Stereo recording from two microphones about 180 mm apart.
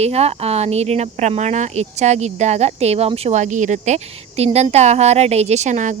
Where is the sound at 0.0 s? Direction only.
35° right (ahead or behind).